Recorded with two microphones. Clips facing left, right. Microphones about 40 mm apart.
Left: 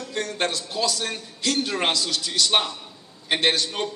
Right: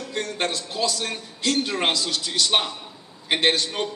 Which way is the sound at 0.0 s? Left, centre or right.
Centre.